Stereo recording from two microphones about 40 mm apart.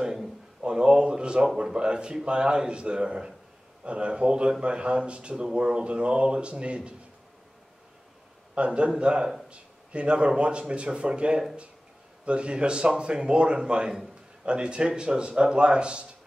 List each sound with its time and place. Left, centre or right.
0.0 s a sound: centre
1.6 s speech: right
8.5 s speech: right